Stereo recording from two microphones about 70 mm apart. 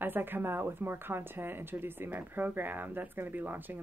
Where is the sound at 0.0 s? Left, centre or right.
Right.